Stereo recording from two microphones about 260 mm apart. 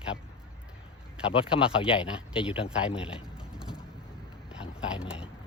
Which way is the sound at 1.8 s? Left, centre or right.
Centre.